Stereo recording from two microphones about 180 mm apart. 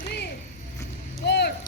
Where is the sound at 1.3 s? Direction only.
65° left (ahead or behind).